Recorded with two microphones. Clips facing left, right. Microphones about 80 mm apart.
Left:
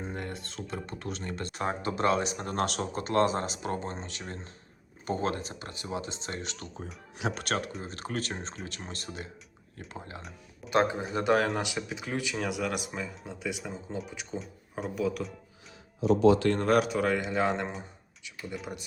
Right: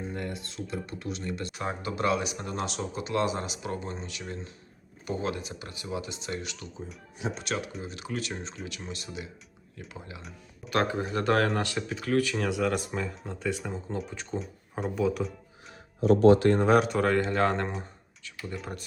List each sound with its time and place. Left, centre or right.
0.0 s computer keyboard: left
0.3 s speech: left
2.5 s speech: left
7.2 s speech: left
7.4 s speech: left
10.7 s speech: centre
12.4 s speech: centre
16.6 s speech: centre